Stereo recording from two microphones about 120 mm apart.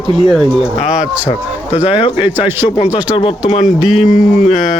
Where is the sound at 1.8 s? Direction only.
45° left (ahead or behind).